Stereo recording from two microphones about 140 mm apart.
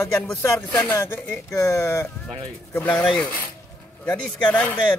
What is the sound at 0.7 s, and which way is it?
Speech, 15° left (ahead or behind).